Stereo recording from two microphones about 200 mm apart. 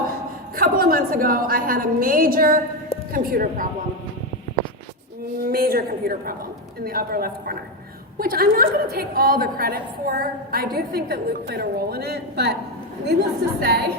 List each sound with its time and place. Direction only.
0.5 s a woman's voice: 45° right (ahead or behind)
5.5 s a woman's voice: 50° right (ahead or behind)